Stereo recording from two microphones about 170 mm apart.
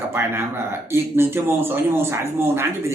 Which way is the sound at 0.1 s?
15° right (ahead or behind).